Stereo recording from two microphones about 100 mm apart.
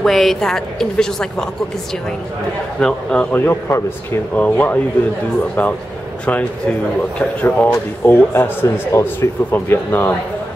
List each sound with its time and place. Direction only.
0.0 s a woman's voice: centre (ahead or behind)
2.8 s a man's voice: 10° left (ahead or behind)
3.3 s a man's voice: 20° left (ahead or behind)
7.2 s a man's voice: 15° left (ahead or behind)